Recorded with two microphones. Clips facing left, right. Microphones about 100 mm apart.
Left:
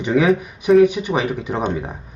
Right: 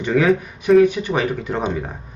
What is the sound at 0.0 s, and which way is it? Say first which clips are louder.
A man's voice: left 1 dB; 15° left (ahead or behind).